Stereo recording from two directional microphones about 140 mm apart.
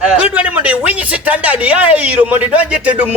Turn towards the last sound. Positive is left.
turn(degrees=-10)  # may be behind; listen again after turning